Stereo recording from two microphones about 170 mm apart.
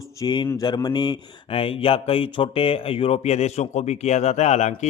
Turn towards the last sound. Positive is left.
turn(degrees=40)  # may be behind; listen again after turning